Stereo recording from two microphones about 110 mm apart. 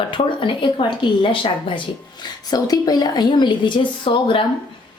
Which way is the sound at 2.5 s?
35° left (ahead or behind).